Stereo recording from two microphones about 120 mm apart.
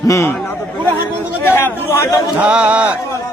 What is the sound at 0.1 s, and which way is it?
Speech, 25° left (ahead or behind).